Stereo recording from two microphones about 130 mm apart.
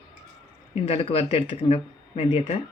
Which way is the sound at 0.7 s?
50° left (ahead or behind).